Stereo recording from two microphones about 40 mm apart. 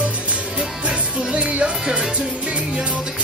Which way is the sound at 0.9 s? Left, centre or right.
Right.